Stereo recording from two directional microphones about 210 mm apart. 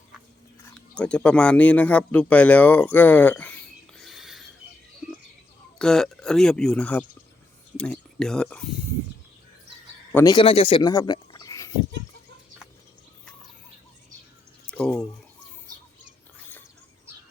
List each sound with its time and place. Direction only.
0.9 s speech: 5° left (ahead or behind)
5.8 s speech: 5° left (ahead or behind)
10.2 s speech: 25° left (ahead or behind)
14.7 s speech: 5° left (ahead or behind)